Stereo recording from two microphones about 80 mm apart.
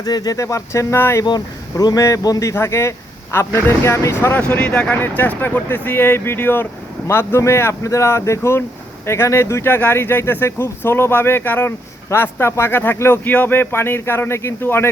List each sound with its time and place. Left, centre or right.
0.0 s speech: left
0.3 s speech: left
4.4 s speech: centre